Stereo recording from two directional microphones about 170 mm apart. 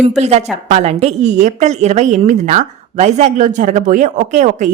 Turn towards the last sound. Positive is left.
turn(degrees=-45)  # may be behind; listen again after turning